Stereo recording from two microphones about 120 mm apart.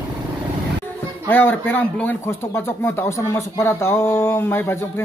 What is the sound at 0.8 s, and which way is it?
Speech, 15° left (ahead or behind).